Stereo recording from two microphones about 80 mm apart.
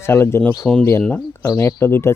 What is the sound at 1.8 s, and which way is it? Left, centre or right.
Speech, left.